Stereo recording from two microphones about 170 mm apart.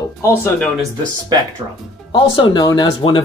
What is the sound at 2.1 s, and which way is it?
Speech, 25° left (ahead or behind).